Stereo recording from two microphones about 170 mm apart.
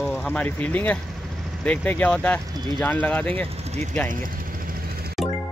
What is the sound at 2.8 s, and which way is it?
Speech, 10° left (ahead or behind).